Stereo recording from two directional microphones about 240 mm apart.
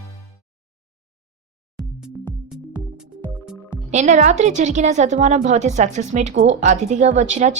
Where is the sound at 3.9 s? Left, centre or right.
Right.